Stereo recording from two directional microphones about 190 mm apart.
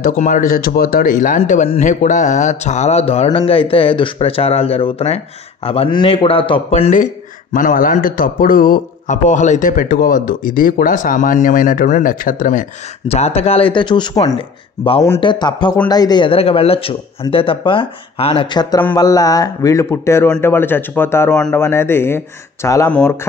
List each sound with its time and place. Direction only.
0.0 s a man's voice: 45° left (ahead or behind)
13.1 s a man's voice: 35° left (ahead or behind); by 23.1 s 10° left (ahead or behind)